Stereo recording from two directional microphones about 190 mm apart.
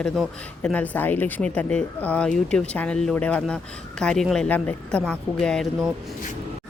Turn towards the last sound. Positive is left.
turn(degrees=0)  # may be behind; listen again after turning